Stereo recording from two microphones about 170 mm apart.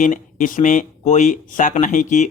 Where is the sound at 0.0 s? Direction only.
50° left (ahead or behind).